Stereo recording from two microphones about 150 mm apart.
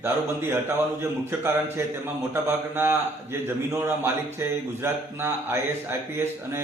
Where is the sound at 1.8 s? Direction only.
15° right (ahead or behind).